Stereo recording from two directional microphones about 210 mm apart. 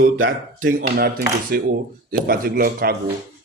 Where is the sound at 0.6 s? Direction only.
40° right (ahead or behind).